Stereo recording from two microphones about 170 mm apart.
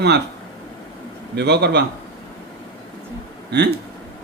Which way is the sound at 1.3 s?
80° right.